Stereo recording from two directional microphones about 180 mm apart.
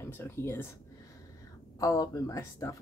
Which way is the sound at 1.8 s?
20° left (ahead or behind).